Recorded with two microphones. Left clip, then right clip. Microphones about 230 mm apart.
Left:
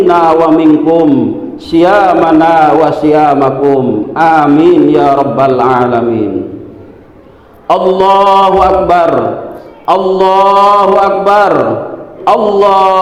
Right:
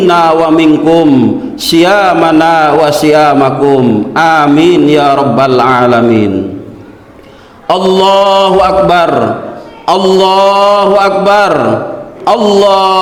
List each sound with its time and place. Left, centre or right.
0.1 s a man's voice: right
7.7 s a man's voice: right